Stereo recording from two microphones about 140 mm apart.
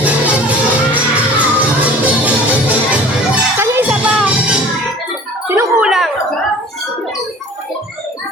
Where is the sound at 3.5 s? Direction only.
15° right (ahead or behind).